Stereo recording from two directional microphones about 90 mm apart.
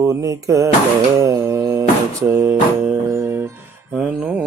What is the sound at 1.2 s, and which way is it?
Music, 35° right (ahead or behind).